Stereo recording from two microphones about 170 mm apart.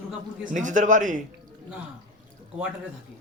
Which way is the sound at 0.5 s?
50° right (ahead or behind).